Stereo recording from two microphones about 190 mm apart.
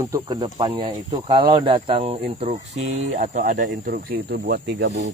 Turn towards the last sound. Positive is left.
turn(degrees=-65)  # may be behind; listen again after turning